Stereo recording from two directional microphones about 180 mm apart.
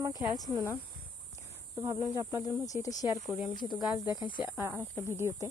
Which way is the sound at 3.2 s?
Centre (ahead or behind).